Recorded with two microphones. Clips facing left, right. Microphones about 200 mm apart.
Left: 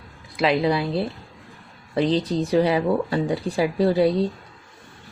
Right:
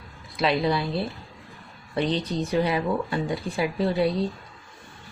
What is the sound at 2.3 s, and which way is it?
Speech, 35° left (ahead or behind).